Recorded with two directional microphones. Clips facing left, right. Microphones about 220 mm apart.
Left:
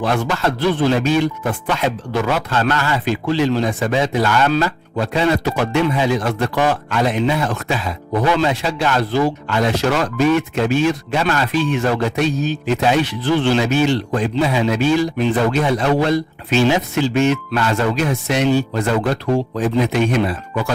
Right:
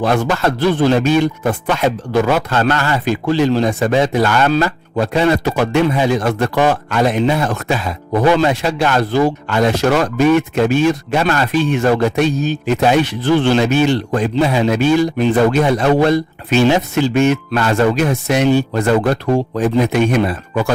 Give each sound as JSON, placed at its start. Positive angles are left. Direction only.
{"t": 0.0, "sound": "speech", "side_deg": -45}